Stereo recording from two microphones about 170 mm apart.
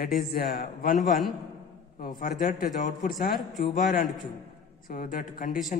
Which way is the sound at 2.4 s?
50° left (ahead or behind).